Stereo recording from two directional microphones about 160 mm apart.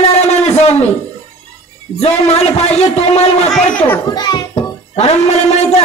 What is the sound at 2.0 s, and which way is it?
A man's voice, 40° left (ahead or behind).